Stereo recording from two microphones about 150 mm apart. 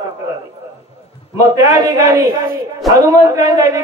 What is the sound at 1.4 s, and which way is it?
A man's voice, 20° right (ahead or behind).